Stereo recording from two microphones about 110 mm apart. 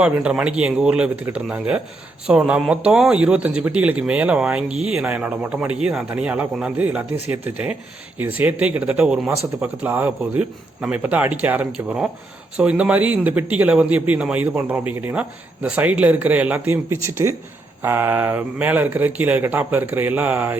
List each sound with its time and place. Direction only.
0.0 s speech: 10° right (ahead or behind)